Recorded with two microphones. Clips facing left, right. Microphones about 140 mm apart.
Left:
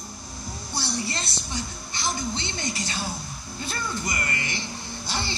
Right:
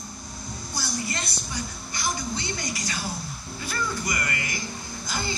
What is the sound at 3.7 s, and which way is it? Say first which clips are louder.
Speech: right 2 dB; 25° left (ahead or behind).